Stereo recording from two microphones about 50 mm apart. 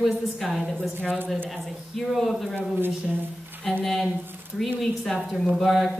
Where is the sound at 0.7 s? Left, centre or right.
Left.